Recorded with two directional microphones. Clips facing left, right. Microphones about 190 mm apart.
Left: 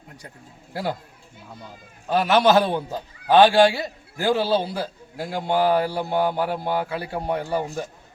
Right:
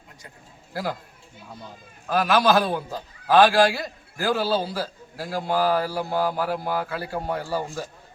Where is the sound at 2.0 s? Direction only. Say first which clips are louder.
Left 2 dB; 25° left (ahead or behind).